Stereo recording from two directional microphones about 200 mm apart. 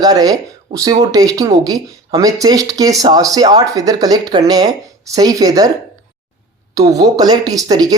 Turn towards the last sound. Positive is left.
turn(degrees=-20)  # may be behind; listen again after turning